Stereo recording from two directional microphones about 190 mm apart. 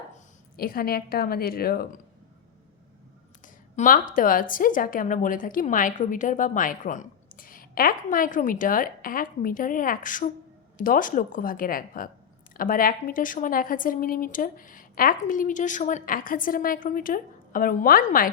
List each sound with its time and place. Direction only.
0.5 s a woman's voice: 50° left (ahead or behind)
3.4 s a woman's voice: 45° left (ahead or behind)